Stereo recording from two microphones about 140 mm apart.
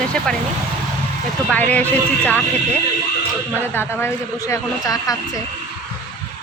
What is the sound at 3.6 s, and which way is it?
A woman's voice, 15° left (ahead or behind).